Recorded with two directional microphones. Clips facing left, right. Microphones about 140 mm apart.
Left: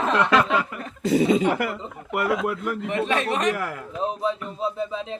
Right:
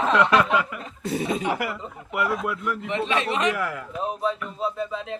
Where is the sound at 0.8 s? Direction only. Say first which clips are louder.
Left 7 dB; 75° left (ahead or behind).